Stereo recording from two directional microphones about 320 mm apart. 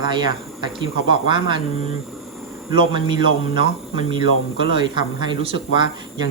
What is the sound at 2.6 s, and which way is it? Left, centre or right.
Speech, centre.